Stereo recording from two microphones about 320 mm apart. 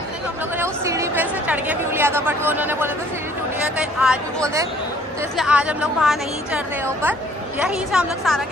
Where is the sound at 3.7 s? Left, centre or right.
Centre.